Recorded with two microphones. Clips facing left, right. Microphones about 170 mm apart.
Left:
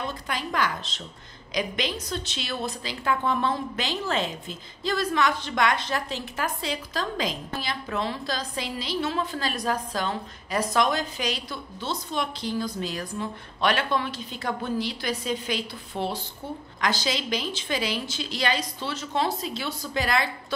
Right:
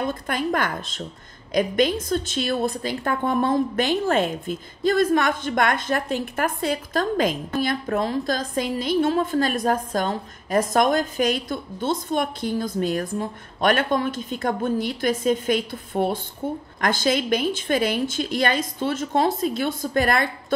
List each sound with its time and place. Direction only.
0.0 s a woman's voice: 50° right (ahead or behind)